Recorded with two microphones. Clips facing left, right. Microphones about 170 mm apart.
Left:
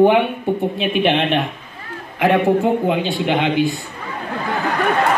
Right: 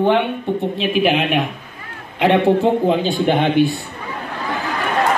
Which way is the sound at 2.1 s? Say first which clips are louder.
Right 1 dB; 25° right (ahead or behind).